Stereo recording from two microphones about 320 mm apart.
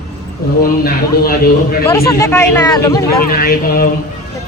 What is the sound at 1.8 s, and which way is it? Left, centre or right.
Speech, centre.